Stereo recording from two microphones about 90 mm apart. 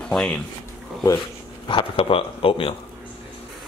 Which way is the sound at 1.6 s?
80° left.